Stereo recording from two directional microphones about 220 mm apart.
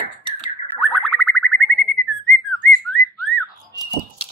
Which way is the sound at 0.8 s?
Centre (ahead or behind).